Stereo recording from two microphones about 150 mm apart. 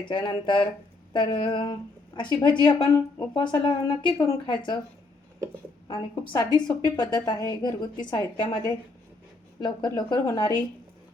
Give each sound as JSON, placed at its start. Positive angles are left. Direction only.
{"t": 0.0, "sound": "a woman's voice", "side_deg": 30}
{"t": 5.9, "sound": "a woman's voice", "side_deg": 25}